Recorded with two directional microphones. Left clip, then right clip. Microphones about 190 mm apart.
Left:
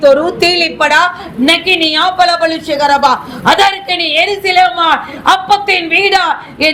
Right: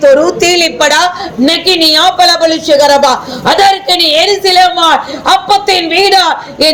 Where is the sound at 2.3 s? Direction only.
60° left (ahead or behind).